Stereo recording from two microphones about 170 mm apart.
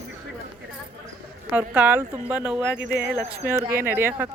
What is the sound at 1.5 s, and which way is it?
Speech, 10° right (ahead or behind).